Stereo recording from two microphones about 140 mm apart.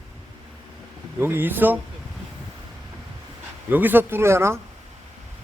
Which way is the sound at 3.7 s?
15° right (ahead or behind).